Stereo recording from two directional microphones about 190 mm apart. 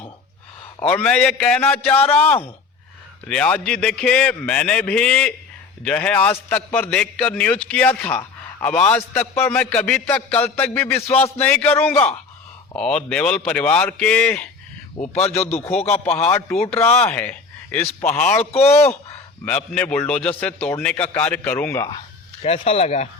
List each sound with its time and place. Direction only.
0.8 s a man's voice: 10° left (ahead or behind)
15.0 s speech: 35° left (ahead or behind)
16.6 s speech: 10° left (ahead or behind)
18.5 s speech: 35° left (ahead or behind)
19.5 s a man's voice: 5° left (ahead or behind)
21.8 s speech: 30° left (ahead or behind)